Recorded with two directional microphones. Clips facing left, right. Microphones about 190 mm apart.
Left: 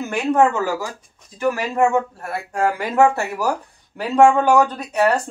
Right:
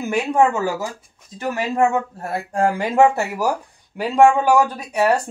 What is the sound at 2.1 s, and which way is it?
Speech, 30° right (ahead or behind).